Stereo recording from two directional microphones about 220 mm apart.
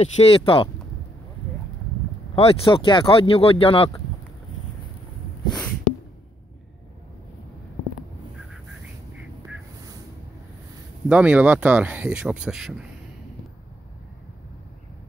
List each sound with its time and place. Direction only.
0.0 s speech: 25° left (ahead or behind)
2.3 s speech: 25° left (ahead or behind)
11.1 s speech: 5° right (ahead or behind)